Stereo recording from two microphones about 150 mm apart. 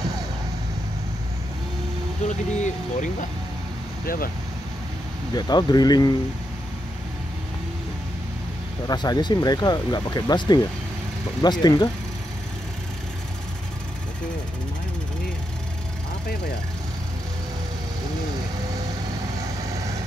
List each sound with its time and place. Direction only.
2.2 s speech: 55° left (ahead or behind)
4.0 s speech: 75° left (ahead or behind)
5.3 s speech: 30° left (ahead or behind)
8.8 s speech: 25° left (ahead or behind)